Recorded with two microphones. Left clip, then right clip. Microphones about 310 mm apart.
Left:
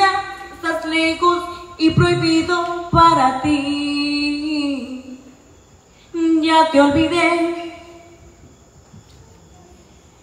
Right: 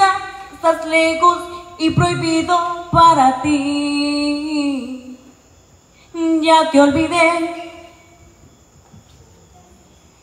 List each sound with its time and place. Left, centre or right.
0.6 s a sound: right
1.8 s music: centre
6.1 s child singing: right